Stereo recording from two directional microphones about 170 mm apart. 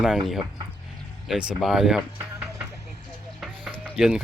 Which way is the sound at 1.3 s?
5° right (ahead or behind).